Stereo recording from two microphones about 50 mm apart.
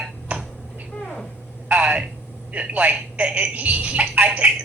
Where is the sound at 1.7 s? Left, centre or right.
Right.